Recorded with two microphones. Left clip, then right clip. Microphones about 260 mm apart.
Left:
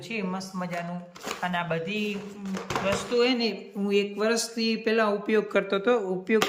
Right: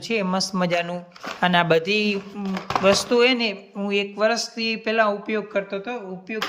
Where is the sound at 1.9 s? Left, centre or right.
Right.